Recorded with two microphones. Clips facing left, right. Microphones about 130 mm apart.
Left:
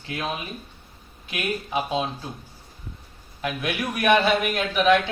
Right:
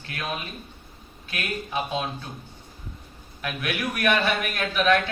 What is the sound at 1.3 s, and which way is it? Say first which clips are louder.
Speech: left 3 dB; 20° left (ahead or behind).